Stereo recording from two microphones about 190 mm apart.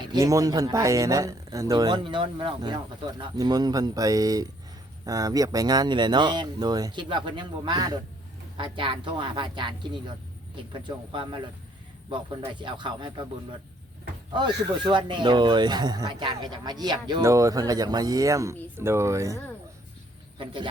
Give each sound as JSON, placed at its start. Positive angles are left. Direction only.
{"t": 0.1, "sound": "speech", "side_deg": -15}
{"t": 12.5, "sound": "speech", "side_deg": -25}
{"t": 14.3, "sound": "speech", "side_deg": -25}
{"t": 20.4, "sound": "speech", "side_deg": -25}